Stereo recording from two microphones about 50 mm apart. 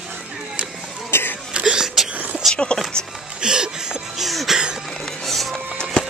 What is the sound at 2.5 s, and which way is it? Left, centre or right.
Speech, left.